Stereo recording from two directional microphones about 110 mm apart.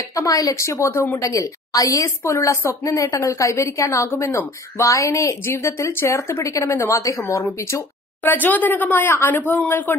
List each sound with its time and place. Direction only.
0.1 s a woman's voice: 30° left (ahead or behind)
1.2 s a woman's voice: 30° left (ahead or behind)